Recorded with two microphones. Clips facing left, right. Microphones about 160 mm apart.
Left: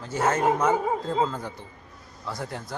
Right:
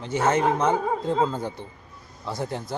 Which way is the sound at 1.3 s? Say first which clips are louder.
Right 4 dB; 25° right (ahead or behind).